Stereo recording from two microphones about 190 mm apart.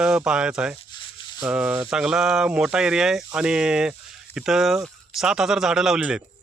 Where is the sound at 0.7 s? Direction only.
25° left (ahead or behind).